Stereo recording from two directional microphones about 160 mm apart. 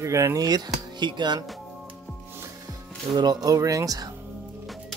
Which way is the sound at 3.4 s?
20° right (ahead or behind).